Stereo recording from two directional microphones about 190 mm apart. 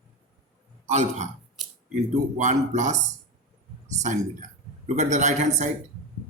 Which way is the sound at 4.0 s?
20° right (ahead or behind).